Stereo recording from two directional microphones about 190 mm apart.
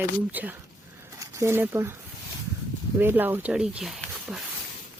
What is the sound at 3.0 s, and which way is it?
Speech, 10° right (ahead or behind).